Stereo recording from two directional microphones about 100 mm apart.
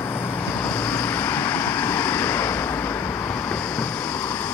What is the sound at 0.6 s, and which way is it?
Vehicle, 15° left (ahead or behind).